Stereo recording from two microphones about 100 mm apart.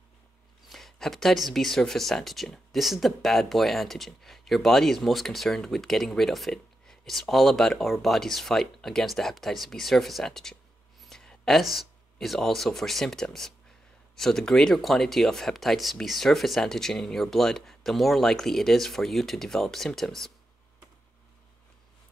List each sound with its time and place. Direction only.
0.7 s speech: centre (ahead or behind)